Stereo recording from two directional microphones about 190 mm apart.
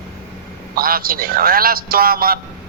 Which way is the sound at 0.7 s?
50° right (ahead or behind).